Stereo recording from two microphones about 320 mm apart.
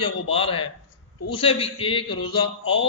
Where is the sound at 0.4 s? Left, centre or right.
Centre.